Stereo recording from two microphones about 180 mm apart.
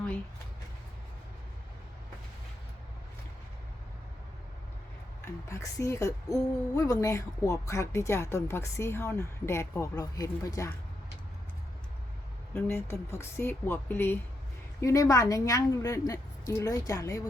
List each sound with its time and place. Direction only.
5.2 s speech: 15° left (ahead or behind)
12.5 s a woman's voice: 15° left (ahead or behind)